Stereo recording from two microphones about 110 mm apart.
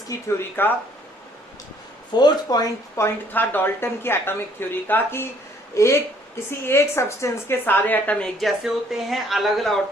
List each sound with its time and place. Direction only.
0.3 s a woman's voice: 20° left (ahead or behind)
2.1 s speech: 40° left (ahead or behind)
3.0 s a woman's voice: 20° left (ahead or behind)
8.4 s speech: centre (ahead or behind)